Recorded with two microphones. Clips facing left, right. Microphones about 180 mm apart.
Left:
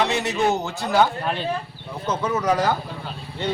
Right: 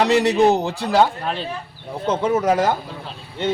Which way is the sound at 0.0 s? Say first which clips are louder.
Right 6 dB; 35° right (ahead or behind).